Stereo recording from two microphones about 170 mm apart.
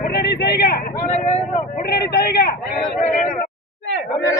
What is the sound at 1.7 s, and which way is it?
Speech, 70° left (ahead or behind).